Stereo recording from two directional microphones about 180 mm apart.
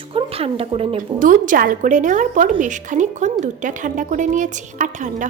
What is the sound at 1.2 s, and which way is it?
A woman's voice, 45° right (ahead or behind).